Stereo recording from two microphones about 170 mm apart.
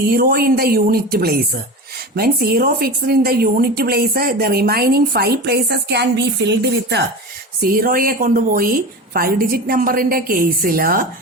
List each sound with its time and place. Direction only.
0.0 s a woman's voice: 65° right (ahead or behind); by 7.0 s 80° right
7.6 s a woman's voice: 60° right (ahead or behind)